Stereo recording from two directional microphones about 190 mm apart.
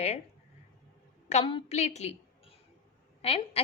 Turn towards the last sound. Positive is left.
turn(degrees=30)  # may be behind; listen again after turning